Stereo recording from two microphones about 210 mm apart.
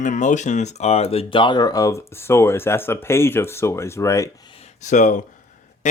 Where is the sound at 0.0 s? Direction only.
35° left (ahead or behind); by 4.3 s 15° left (ahead or behind).